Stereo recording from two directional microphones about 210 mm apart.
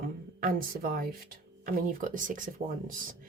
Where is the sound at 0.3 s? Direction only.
45° right (ahead or behind).